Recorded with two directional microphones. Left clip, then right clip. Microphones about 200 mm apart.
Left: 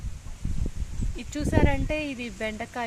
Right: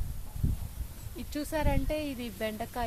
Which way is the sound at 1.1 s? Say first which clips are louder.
Left 6 dB; 25° left (ahead or behind).